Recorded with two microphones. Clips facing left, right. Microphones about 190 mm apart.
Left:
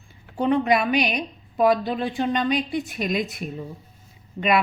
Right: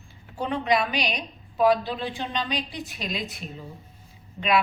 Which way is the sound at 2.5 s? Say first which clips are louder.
Left 7 dB; 50° left (ahead or behind).